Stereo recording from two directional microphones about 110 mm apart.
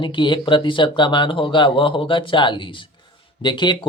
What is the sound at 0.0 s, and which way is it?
Speech, 50° left (ahead or behind).